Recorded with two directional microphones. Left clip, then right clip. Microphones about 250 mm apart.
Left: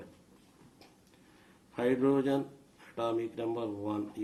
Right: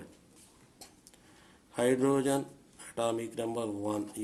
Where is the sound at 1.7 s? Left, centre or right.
Right.